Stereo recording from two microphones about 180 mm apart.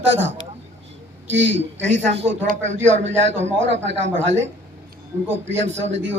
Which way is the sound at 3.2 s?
90° right.